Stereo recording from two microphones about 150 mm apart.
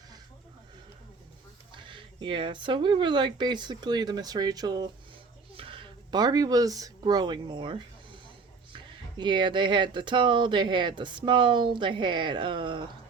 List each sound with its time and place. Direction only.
1.7 s speech: 35° right (ahead or behind)